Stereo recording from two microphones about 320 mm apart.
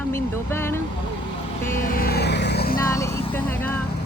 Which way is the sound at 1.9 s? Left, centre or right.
Left.